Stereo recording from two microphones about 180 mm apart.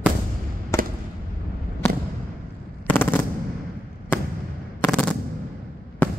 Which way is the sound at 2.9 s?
10° left (ahead or behind).